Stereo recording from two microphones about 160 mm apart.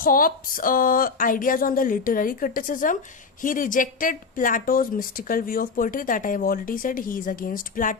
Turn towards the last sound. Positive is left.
turn(degrees=55)  # may be behind; listen again after turning